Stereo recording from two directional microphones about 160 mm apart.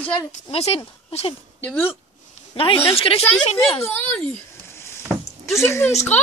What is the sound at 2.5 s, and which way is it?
A woman's voice, 35° left (ahead or behind).